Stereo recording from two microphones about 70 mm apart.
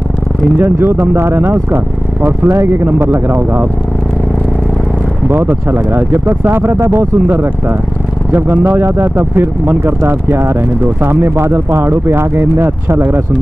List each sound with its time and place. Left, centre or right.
0.6 s speech: right
2.4 s speech: right
3.0 s speech: right
5.3 s speech: right